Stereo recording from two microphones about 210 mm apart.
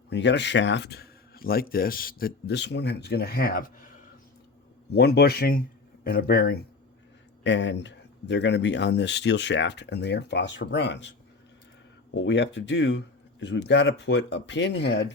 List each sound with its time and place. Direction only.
0.1 s speech: 55° left (ahead or behind)
4.9 s speech: 50° left (ahead or behind)
12.1 s speech: 55° left (ahead or behind)